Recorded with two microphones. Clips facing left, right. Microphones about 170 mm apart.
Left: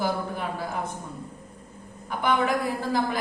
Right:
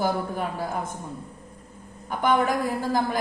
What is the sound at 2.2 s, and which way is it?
Speech, 45° right (ahead or behind).